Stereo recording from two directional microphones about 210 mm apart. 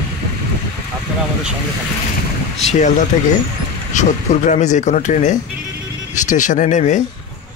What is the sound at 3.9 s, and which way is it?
Speech, 35° left (ahead or behind).